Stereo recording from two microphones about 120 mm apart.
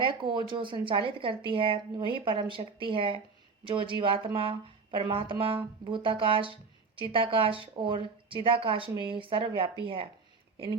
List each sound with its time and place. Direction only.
0.0 s a woman's voice: 45° right (ahead or behind)